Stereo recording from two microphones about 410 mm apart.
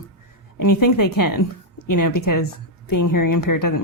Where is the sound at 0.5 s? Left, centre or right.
Left.